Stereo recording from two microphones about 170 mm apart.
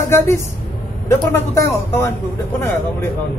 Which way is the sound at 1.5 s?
15° left (ahead or behind).